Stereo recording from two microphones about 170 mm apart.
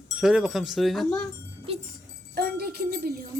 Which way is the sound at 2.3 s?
65° right (ahead or behind).